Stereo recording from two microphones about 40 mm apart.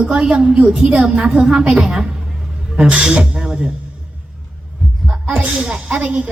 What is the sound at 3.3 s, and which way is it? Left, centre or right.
Music, centre.